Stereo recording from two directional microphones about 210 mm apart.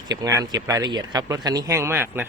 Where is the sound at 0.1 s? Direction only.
15° right (ahead or behind).